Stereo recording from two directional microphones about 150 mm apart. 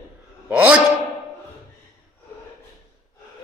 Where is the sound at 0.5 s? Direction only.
10° right (ahead or behind).